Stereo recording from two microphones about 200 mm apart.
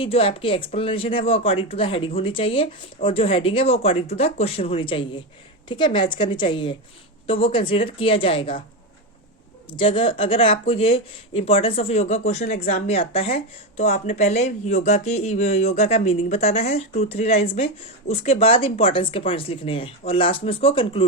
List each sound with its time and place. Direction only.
0.0 s speech: 30° left (ahead or behind)
9.6 s speech: 25° left (ahead or behind)